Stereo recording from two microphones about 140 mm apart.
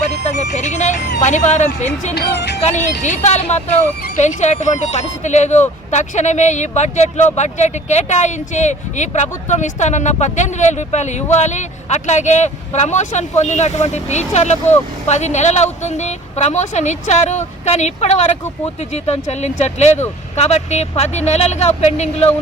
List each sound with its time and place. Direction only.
0.0 s speech: 55° left (ahead or behind)